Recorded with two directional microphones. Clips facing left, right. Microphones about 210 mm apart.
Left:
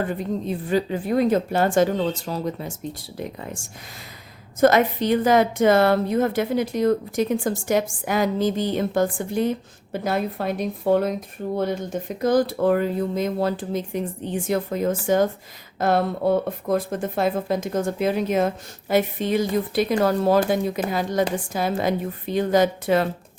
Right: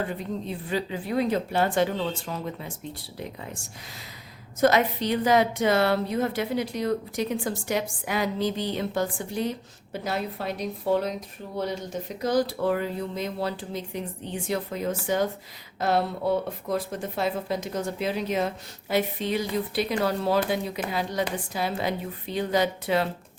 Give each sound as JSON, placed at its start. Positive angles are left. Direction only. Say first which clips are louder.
{"t": 0.0, "sound": "a woman's voice", "louder": "left 5 dB", "side_deg": 50}
{"t": 3.2, "sound": "a woman's voice", "louder": "left 5 dB", "side_deg": 50}
{"t": 4.6, "sound": "a woman's voice", "louder": "left 4 dB", "side_deg": 50}